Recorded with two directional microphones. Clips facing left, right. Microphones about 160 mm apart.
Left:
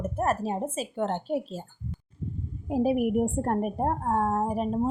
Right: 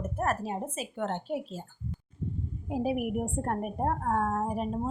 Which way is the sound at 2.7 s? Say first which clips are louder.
Left 6 dB; 35° left (ahead or behind).